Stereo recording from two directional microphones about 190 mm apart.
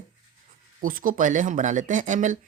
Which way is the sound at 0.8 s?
45° right (ahead or behind).